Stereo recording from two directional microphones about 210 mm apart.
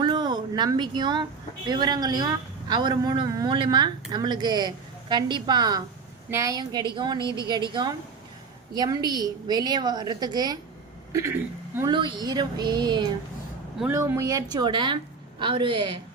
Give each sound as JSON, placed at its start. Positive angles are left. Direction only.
{"t": 0.0, "sound": "a woman's voice", "side_deg": -20}
{"t": 7.2, "sound": "a woman's voice", "side_deg": 15}
{"t": 7.4, "sound": "a woman's voice", "side_deg": -20}
{"t": 13.7, "sound": "a woman's voice", "side_deg": -10}